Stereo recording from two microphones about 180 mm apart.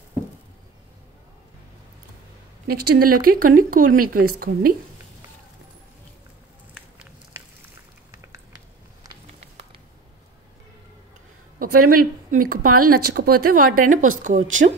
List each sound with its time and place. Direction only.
2.7 s speech: 50° right (ahead or behind)
11.7 s speech: 55° right (ahead or behind)